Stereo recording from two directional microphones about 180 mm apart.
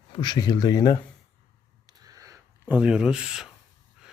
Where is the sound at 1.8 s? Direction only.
20° right (ahead or behind); by 3.5 s 5° right (ahead or behind).